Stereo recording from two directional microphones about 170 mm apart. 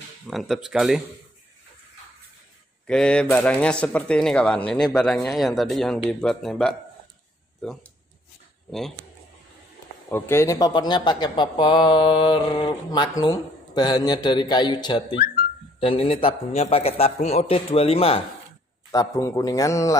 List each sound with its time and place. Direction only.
0.3 s speech: centre (ahead or behind)
2.9 s speech: 5° left (ahead or behind)
10.0 s a man's voice: 15° left (ahead or behind); by 18.2 s 35° left (ahead or behind)
18.9 s a man's voice: 20° left (ahead or behind)